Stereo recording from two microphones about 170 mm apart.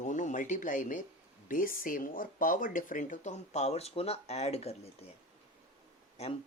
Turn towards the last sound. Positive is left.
turn(degrees=35)  # may be behind; listen again after turning